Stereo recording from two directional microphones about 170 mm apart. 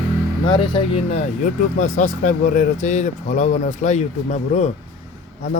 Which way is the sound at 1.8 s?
45° left (ahead or behind).